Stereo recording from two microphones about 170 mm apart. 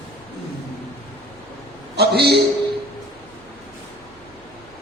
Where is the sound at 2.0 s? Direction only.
75° right (ahead or behind).